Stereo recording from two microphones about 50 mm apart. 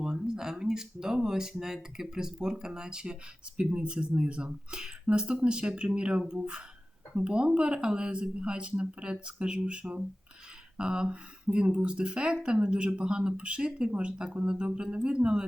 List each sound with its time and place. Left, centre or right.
0.3 s speech: centre